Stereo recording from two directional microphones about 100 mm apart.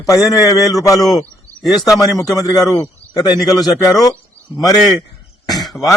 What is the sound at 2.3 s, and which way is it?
A man's voice, 35° left (ahead or behind).